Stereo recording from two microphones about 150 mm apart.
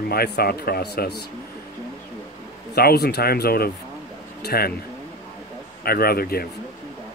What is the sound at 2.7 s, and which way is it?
Speech, 90° left.